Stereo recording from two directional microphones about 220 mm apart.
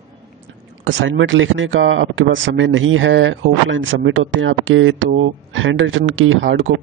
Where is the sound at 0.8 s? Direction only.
60° right (ahead or behind).